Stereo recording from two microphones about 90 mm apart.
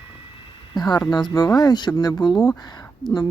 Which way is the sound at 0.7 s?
50° left (ahead or behind).